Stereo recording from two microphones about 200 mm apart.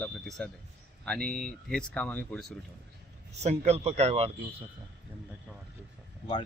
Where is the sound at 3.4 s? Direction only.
35° right (ahead or behind).